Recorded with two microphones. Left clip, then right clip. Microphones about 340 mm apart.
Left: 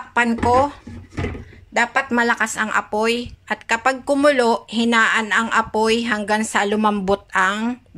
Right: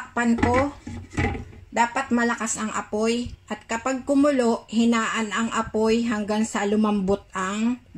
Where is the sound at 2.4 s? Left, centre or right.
Left.